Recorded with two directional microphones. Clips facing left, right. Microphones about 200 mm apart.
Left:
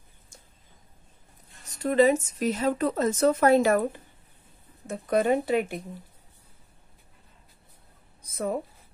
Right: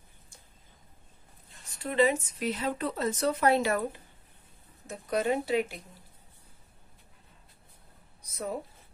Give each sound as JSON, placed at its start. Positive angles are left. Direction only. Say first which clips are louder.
{"t": 1.7, "sound": "speech", "louder": "left 5 dB", "side_deg": 40}
{"t": 4.8, "sound": "speech", "louder": "left 5 dB", "side_deg": 55}
{"t": 8.2, "sound": "a sound", "louder": "left 6 dB", "side_deg": 55}